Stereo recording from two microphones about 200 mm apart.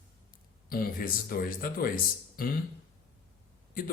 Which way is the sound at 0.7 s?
45° left (ahead or behind).